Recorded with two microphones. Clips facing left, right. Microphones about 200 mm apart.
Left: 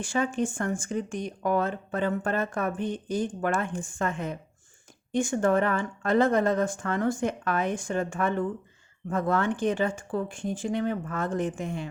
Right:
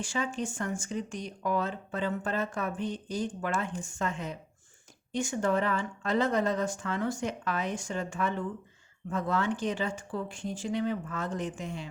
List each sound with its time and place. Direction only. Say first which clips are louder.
0.0 s speech: left 5 dB; 55° left (ahead or behind)